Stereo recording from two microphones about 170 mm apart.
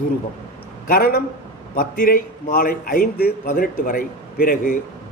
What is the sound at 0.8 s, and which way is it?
A man's voice, 60° left (ahead or behind).